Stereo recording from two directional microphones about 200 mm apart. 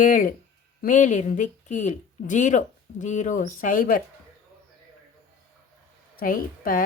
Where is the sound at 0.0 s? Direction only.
45° left (ahead or behind).